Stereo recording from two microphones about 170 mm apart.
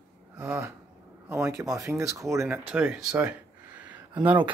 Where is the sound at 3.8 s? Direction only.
10° right (ahead or behind).